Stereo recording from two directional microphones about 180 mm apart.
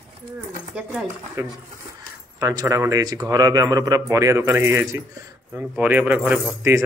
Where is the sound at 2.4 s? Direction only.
20° right (ahead or behind).